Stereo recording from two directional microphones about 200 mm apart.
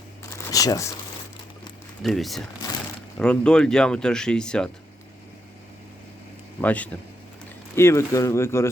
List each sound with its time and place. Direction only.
0.3 s a sound: 15° left (ahead or behind)
2.0 s speech: centre (ahead or behind)
6.6 s speech: 5° left (ahead or behind)